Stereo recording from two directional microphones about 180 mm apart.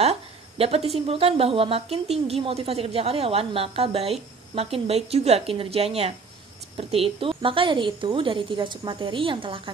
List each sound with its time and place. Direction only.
0.0 s a woman's voice: 35° right (ahead or behind)